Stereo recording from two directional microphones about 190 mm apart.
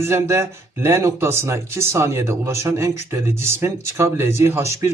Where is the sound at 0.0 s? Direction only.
15° right (ahead or behind).